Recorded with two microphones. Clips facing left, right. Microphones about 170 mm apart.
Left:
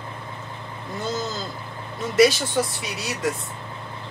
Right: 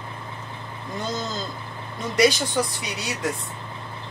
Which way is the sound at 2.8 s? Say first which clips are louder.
Left 1 dB; centre (ahead or behind).